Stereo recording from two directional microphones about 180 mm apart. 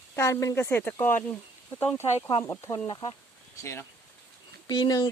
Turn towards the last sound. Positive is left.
turn(degrees=25)  # may be behind; listen again after turning